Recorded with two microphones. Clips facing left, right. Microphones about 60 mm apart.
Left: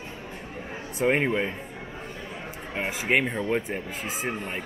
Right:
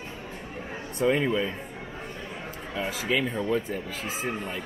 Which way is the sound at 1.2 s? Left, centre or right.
Left.